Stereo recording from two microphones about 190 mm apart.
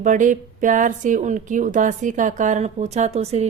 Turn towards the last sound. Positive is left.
turn(degrees=-35)  # may be behind; listen again after turning